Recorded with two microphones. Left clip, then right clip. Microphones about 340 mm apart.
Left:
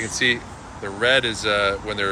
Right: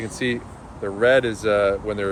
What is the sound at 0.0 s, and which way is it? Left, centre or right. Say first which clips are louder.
Speech: left 5 dB; right.